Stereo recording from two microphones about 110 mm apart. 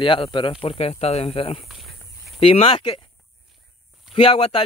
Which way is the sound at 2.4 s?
65° left (ahead or behind).